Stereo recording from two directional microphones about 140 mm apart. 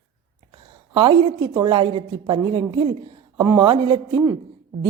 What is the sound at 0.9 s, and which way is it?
Speech, 35° right (ahead or behind).